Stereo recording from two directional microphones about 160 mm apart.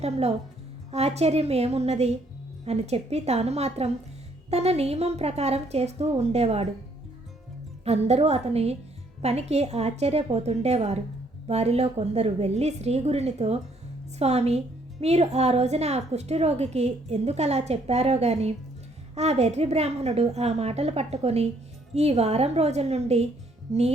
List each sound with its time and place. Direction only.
0.0 s a woman's voice: 40° right (ahead or behind)
7.9 s a woman's voice: 40° right (ahead or behind)